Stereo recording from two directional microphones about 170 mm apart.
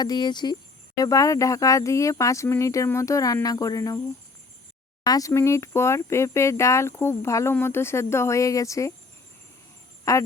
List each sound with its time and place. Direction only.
0.0 s speech: 25° left (ahead or behind)
5.0 s speech: 20° left (ahead or behind)
10.1 s speech: 20° left (ahead or behind)